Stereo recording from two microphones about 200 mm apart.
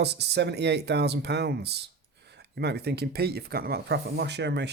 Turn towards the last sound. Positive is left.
turn(degrees=-60)  # may be behind; listen again after turning